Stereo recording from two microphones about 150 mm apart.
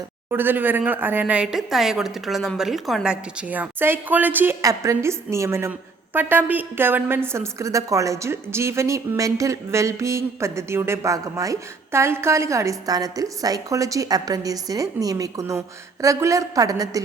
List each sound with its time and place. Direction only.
0.3 s a woman's voice: 15° right (ahead or behind)